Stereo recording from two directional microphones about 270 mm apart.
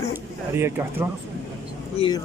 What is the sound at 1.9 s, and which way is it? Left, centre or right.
Speech, centre.